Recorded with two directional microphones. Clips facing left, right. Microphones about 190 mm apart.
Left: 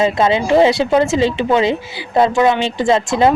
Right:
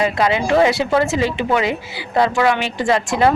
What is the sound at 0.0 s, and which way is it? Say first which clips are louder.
Speech: left 3 dB; 25° left (ahead or behind).